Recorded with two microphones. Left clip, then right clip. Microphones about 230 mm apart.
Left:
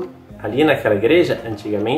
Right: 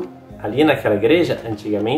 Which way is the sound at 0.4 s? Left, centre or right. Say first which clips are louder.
Even; centre.